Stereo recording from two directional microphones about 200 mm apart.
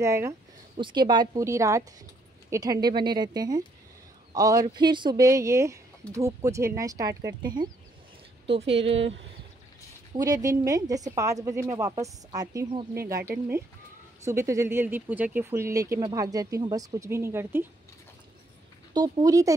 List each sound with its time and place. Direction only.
0.0 s speech: 15° right (ahead or behind); by 8.9 s 30° right (ahead or behind)
10.1 s speech: 20° right (ahead or behind)
18.9 s speech: 20° right (ahead or behind)